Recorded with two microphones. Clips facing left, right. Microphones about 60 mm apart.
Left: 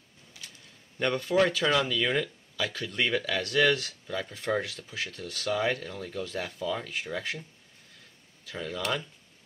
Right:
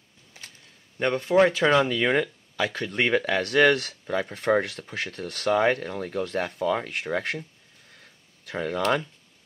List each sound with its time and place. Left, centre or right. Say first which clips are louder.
0.3 s a sound: right 2 dB; right
0.9 s speech: right 5 dB; right
8.5 s speech: right 7 dB; right